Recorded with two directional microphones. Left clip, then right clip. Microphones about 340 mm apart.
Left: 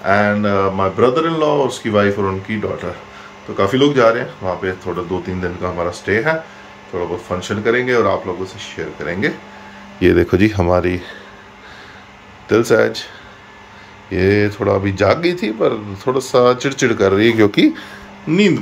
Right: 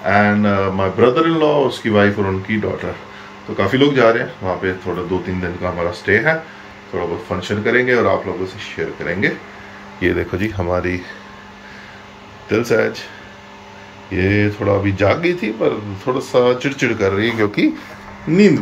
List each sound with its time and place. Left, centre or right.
0.0 s speech: centre
9.9 s speech: left
12.4 s speech: centre
14.1 s speech: centre